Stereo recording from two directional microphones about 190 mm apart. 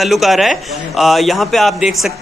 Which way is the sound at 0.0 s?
Centre (ahead or behind).